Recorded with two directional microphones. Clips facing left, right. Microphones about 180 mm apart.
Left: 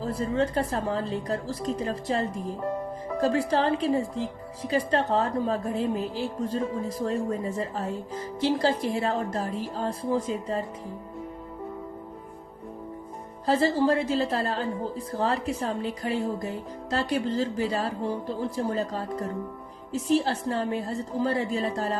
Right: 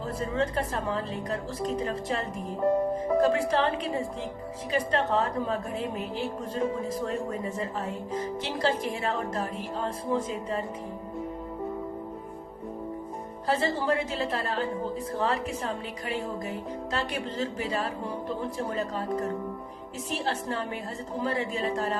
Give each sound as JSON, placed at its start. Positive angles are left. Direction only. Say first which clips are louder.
{"t": 0.0, "sound": "speech", "louder": "left 3 dB", "side_deg": 35}
{"t": 13.5, "sound": "speech", "louder": "left 4 dB", "side_deg": 35}